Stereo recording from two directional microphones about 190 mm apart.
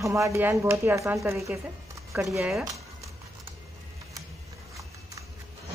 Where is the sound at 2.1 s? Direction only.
Centre (ahead or behind).